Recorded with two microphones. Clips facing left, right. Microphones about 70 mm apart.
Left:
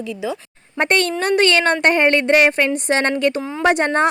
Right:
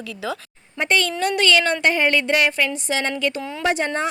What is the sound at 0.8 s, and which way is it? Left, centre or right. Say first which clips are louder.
A woman's voice: left 3 dB; left.